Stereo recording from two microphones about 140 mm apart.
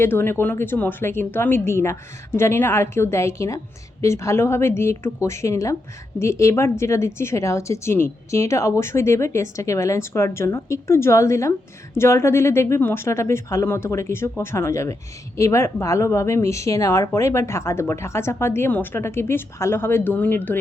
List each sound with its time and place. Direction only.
0.0 s speech: 15° left (ahead or behind)